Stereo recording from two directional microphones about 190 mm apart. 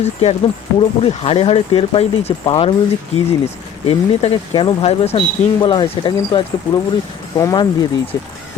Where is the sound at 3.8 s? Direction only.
30° left (ahead or behind).